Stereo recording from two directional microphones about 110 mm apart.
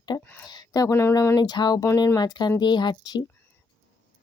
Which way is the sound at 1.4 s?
40° left (ahead or behind).